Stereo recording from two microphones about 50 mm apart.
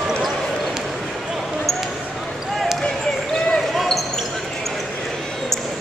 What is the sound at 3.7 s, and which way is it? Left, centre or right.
Basketball bounce, centre.